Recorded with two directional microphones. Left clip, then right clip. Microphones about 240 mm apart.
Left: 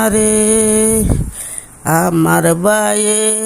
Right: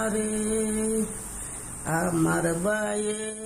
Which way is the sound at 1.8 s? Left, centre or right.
Left.